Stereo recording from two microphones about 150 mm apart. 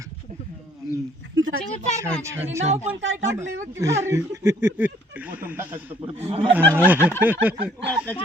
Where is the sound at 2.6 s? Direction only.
45° right (ahead or behind).